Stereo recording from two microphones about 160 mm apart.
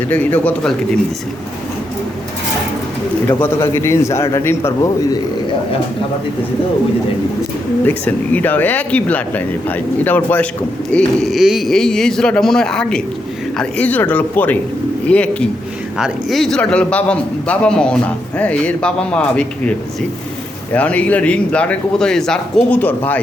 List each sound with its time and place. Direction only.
0.1 s speech: 10° left (ahead or behind)
3.2 s speech: 15° left (ahead or behind)
7.9 s speech: 10° left (ahead or behind)
20.7 s speech: 10° left (ahead or behind)